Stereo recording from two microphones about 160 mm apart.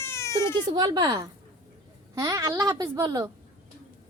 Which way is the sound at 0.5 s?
25° right (ahead or behind).